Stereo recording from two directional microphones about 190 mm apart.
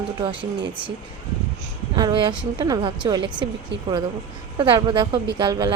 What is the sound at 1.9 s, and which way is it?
Speech, 25° right (ahead or behind).